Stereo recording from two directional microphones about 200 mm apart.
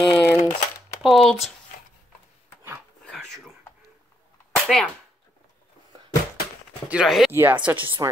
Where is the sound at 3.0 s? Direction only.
5° left (ahead or behind).